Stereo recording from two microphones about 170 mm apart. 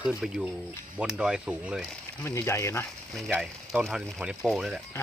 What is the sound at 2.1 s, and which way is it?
Speech, 15° left (ahead or behind).